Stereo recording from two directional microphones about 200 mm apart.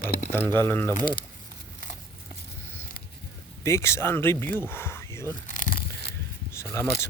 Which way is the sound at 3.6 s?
15° left (ahead or behind).